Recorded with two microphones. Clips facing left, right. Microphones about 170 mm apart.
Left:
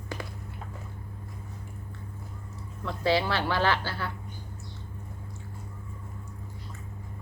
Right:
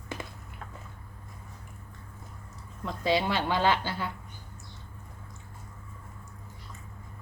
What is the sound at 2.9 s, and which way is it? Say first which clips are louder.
A woman's voice: left 1 dB; 20° right (ahead or behind).